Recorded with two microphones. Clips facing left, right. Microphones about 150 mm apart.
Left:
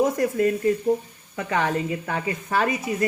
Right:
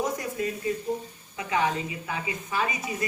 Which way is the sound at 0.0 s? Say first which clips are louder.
Left 8 dB; 55° left (ahead or behind).